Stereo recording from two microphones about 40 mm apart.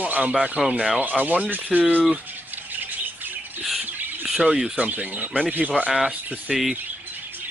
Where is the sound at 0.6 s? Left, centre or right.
Centre.